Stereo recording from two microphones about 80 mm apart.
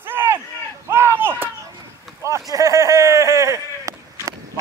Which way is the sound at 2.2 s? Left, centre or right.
Right.